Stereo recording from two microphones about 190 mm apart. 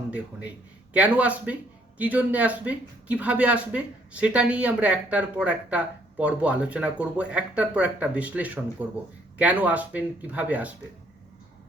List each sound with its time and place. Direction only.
0.9 s speech: 5° right (ahead or behind)